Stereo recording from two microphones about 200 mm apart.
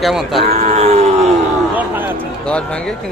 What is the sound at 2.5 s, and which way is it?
Speech, 5° left (ahead or behind).